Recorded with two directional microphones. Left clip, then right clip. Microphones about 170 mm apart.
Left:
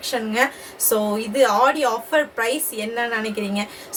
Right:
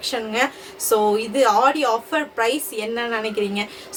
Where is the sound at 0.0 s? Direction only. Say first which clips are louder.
Left 1 dB; 20° right (ahead or behind).